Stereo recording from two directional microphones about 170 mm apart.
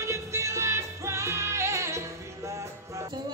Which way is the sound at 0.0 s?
15° right (ahead or behind).